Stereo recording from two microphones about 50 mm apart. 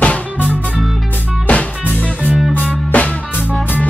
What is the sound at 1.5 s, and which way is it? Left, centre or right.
Music, left.